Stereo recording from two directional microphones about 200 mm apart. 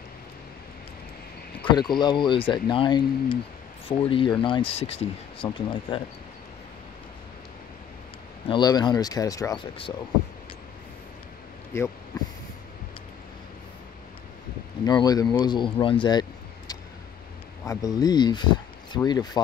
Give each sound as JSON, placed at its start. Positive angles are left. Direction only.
{"t": 1.6, "sound": "speech", "side_deg": 25}
{"t": 8.5, "sound": "speech", "side_deg": 20}
{"t": 14.9, "sound": "speech", "side_deg": 20}